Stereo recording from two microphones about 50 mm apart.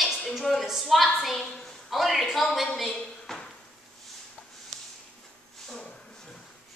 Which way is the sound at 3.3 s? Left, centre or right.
Centre.